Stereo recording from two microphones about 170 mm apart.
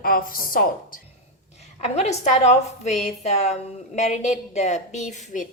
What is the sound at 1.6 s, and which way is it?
A woman's voice, 40° left (ahead or behind).